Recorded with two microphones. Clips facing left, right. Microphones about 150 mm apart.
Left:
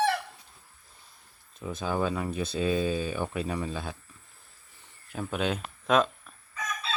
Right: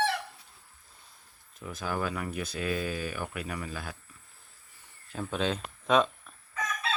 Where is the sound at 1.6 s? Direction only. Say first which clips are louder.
Left 4 dB; 20° left (ahead or behind).